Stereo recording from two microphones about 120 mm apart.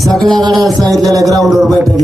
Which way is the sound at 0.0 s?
5° left (ahead or behind).